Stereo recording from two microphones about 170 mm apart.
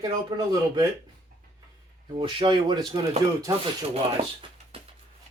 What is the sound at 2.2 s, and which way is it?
Speech, 30° right (ahead or behind).